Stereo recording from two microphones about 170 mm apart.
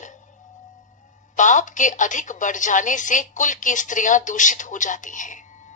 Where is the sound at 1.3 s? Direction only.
45° left (ahead or behind).